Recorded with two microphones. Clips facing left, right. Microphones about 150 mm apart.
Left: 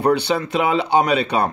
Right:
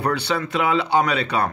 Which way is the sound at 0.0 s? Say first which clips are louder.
Left 5 dB; 20° left (ahead or behind).